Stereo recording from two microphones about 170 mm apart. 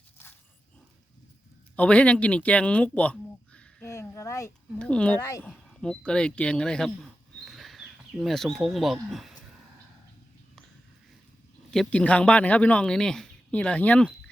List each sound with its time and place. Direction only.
1.7 s speech: 10° left (ahead or behind)
3.8 s a sound: 15° left (ahead or behind)
4.8 s speech: 5° left (ahead or behind)
11.7 s speech: 5° left (ahead or behind)